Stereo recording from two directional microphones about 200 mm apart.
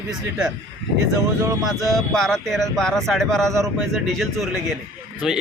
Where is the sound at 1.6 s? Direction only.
Centre (ahead or behind).